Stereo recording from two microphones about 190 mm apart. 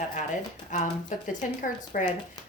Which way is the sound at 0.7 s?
40° left (ahead or behind).